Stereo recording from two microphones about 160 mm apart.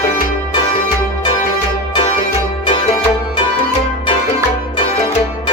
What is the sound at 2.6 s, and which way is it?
Music, 35° left (ahead or behind).